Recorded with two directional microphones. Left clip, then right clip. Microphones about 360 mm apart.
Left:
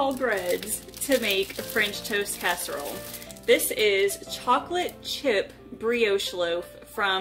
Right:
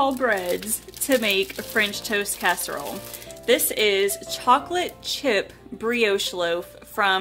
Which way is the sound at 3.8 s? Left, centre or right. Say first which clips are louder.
Right 2 dB; right.